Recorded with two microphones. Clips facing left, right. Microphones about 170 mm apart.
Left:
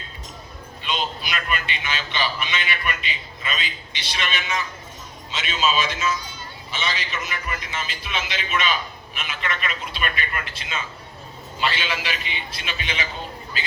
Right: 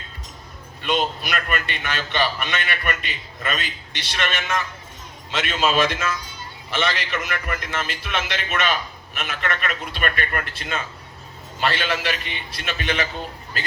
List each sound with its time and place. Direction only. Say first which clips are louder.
0.8 s a man's voice: right 5 dB; 55° right (ahead or behind)